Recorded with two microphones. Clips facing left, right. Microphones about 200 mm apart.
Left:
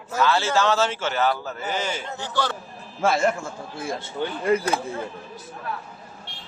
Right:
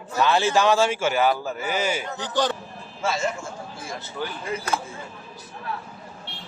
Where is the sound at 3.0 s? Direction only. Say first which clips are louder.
Left 5 dB; 55° left (ahead or behind).